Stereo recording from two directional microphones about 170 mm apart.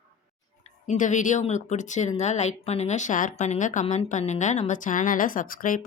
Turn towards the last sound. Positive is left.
turn(degrees=55)  # may be behind; listen again after turning